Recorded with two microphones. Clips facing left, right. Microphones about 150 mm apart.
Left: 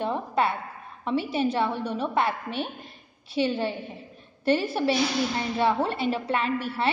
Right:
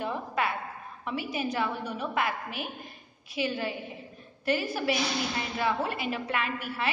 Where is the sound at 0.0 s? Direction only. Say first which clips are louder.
Left 5 dB; 30° left (ahead or behind).